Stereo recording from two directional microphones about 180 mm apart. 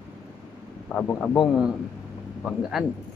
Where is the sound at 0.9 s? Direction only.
5° left (ahead or behind).